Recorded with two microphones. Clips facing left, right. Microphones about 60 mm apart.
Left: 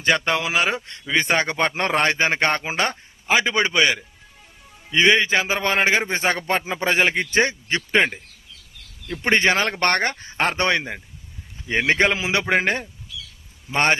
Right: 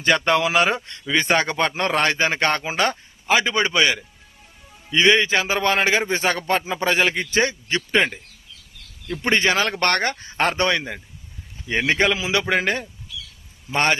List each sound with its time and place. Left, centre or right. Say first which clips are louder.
0.0 s a man's voice: right 2 dB; centre
5.0 s a man's voice: even; centre; by 7.8 s left
7.8 s a man's voice: left 1 dB; centre
9.2 s speech: left 1 dB; left
10.2 s a man's voice: right 2 dB; centre
11.9 s speech: left 1 dB; left